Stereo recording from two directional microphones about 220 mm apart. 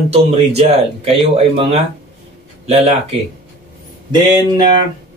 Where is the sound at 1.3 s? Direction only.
25° right (ahead or behind).